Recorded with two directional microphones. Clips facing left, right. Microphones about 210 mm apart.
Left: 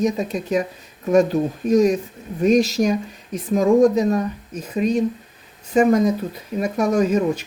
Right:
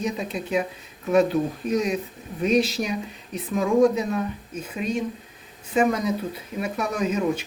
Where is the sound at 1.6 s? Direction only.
45° left (ahead or behind).